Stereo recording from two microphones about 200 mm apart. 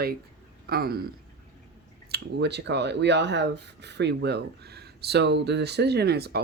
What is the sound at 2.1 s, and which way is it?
Speech, 55° right (ahead or behind).